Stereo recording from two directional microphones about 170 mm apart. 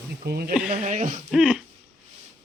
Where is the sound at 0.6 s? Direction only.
45° right (ahead or behind).